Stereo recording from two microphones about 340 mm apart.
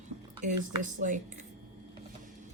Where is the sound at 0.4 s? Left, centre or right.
Right.